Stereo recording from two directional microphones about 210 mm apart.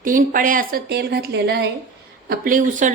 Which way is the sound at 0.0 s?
40° right (ahead or behind).